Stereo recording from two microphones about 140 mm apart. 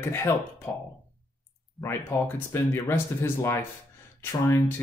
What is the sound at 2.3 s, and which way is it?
Speech, 15° left (ahead or behind).